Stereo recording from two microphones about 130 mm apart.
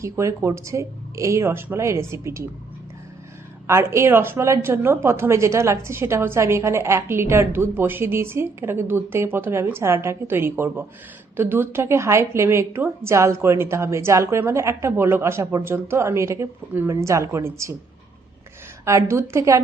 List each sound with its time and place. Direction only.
0.0 s a woman's voice: 20° right (ahead or behind)
3.7 s a woman's voice: 20° right (ahead or behind)
18.9 s a woman's voice: 20° right (ahead or behind)